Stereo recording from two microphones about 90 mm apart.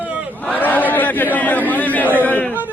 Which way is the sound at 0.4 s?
20° left (ahead or behind).